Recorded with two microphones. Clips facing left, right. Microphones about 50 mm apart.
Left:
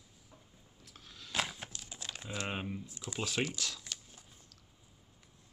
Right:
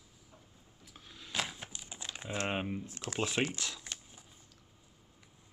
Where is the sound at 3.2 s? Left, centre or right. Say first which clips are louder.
Right 2 dB; right.